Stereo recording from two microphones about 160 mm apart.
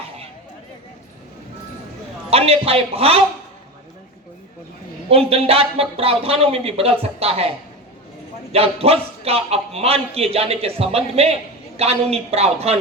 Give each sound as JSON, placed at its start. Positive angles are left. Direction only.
{"t": 2.3, "sound": "a man's voice", "side_deg": -40}
{"t": 5.0, "sound": "a man's voice", "side_deg": -35}
{"t": 8.5, "sound": "a man's voice", "side_deg": -40}